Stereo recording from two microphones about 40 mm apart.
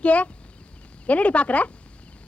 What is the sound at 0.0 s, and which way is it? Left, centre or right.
Speech, left.